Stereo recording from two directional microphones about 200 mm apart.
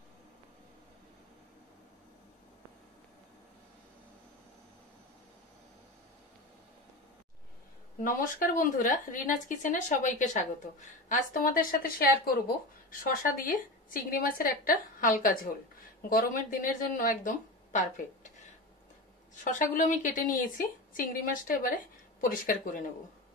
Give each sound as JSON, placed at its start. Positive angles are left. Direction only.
{"t": 8.0, "sound": "a woman's voice", "side_deg": 45}
{"t": 13.1, "sound": "a woman's voice", "side_deg": 45}
{"t": 19.3, "sound": "a woman's voice", "side_deg": 40}